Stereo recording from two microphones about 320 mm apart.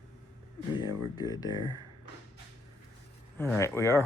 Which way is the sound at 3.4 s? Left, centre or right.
Centre.